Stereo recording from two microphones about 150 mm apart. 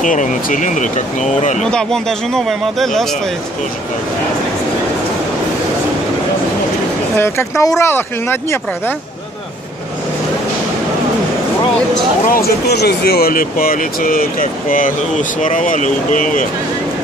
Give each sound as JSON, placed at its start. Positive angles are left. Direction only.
{"t": 0.0, "sound": "speech", "side_deg": 60}
{"t": 1.6, "sound": "speech", "side_deg": 5}
{"t": 7.2, "sound": "speech", "side_deg": 15}
{"t": 12.3, "sound": "speech", "side_deg": 90}